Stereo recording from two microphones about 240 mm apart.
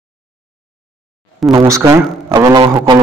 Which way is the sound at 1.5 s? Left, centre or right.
Centre.